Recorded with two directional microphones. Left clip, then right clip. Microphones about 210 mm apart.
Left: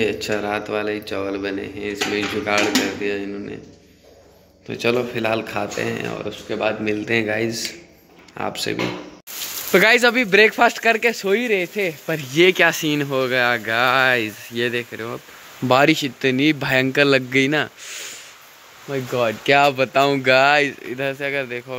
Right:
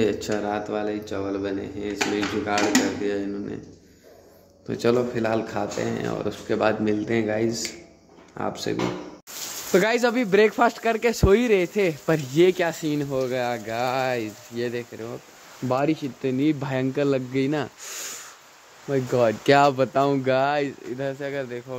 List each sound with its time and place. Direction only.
0.0 s speech: 20° right (ahead or behind)
0.3 s speech: 10° right (ahead or behind)
4.6 s speech: 20° right (ahead or behind)
6.2 s speech: 30° right (ahead or behind)
6.8 s speech: 15° right (ahead or behind)
12.4 s speech: 5° right (ahead or behind)
17.8 s a sound: 35° right (ahead or behind)
18.9 s speech: 30° right (ahead or behind); by 21.7 s centre (ahead or behind)